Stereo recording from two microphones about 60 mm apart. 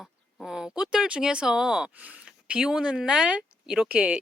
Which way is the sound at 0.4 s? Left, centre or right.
Centre.